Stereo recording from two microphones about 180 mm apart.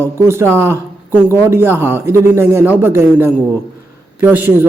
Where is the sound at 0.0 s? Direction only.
15° right (ahead or behind).